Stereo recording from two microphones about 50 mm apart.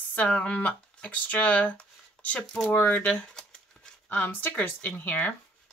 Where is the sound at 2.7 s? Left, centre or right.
Left.